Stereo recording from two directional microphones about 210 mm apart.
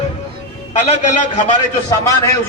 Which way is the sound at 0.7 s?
35° left (ahead or behind).